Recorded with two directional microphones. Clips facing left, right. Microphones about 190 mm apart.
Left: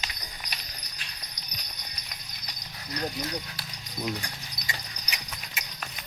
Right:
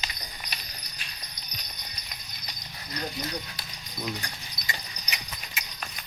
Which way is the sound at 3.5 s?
10° left (ahead or behind).